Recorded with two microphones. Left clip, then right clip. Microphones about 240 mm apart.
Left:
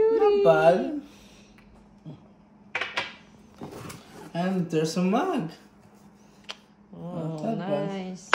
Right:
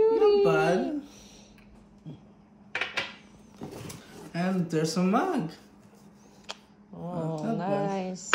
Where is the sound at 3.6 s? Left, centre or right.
Centre.